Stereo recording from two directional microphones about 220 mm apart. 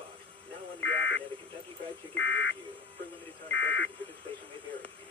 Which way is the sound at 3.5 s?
55° left (ahead or behind).